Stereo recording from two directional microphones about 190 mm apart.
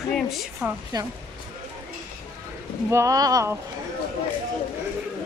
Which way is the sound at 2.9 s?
15° right (ahead or behind).